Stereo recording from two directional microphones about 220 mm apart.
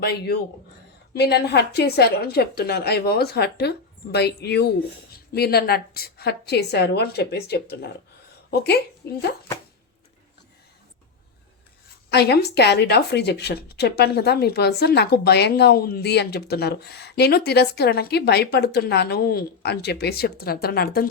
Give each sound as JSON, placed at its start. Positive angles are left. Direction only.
{"t": 0.0, "sound": "speech", "side_deg": 50}
{"t": 12.1, "sound": "speech", "side_deg": 50}